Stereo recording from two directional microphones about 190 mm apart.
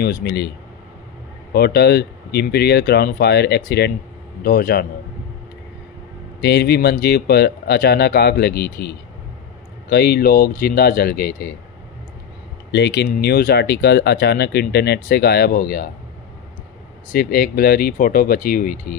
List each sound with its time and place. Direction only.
0.0 s speech: 60° left (ahead or behind)
1.5 s speech: 60° left (ahead or behind)
6.4 s speech: 60° left (ahead or behind)
12.7 s speech: 65° left (ahead or behind); by 15.9 s 50° left (ahead or behind)
17.1 s speech: 50° left (ahead or behind)